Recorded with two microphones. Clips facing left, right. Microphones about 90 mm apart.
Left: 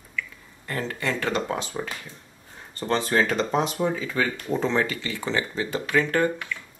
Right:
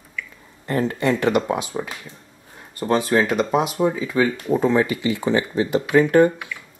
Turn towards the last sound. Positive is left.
turn(degrees=-15)  # may be behind; listen again after turning